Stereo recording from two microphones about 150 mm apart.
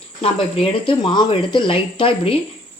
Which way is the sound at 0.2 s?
40° left (ahead or behind).